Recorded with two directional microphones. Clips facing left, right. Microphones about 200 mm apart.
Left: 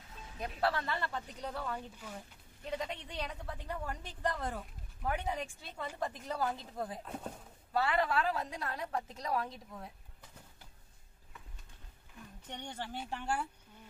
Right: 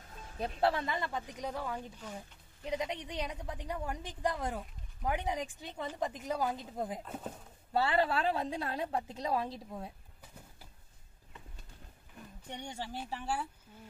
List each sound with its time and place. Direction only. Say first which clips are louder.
0.6 s a woman's voice: right 2 dB; 20° right (ahead or behind)
7.1 s speech: right 1 dB; centre (ahead or behind)
7.7 s a woman's voice: right 2 dB; 30° right (ahead or behind)
12.4 s a woman's voice: right 1 dB; 10° right (ahead or behind)